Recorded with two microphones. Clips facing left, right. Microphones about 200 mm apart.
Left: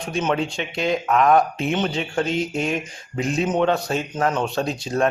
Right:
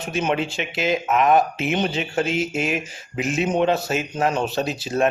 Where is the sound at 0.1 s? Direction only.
5° right (ahead or behind).